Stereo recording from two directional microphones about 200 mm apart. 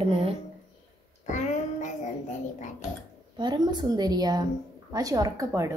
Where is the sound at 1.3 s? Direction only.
35° left (ahead or behind).